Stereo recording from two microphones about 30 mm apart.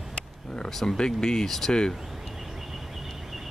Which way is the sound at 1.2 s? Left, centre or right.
Left.